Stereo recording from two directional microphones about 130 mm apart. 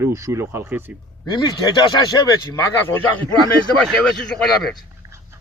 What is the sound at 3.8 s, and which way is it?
Speech, 5° left (ahead or behind).